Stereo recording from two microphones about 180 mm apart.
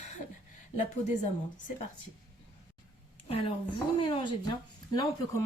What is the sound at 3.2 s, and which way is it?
A woman's voice, 30° left (ahead or behind).